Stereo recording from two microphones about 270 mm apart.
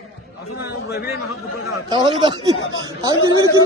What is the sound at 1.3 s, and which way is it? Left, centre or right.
A man's voice, centre.